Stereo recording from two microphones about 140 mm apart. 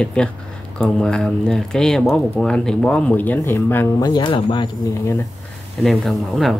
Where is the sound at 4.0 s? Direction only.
30° left (ahead or behind).